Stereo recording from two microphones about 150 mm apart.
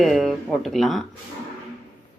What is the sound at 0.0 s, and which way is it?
Speech, centre (ahead or behind).